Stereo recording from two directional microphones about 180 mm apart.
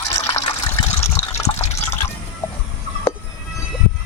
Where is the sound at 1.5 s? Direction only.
35° left (ahead or behind).